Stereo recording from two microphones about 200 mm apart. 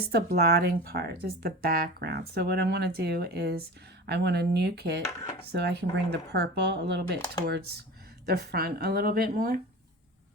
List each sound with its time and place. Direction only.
0.0 s speech: 50° right (ahead or behind)